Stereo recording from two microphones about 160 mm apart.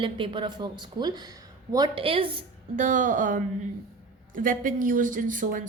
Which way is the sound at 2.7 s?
50° right (ahead or behind).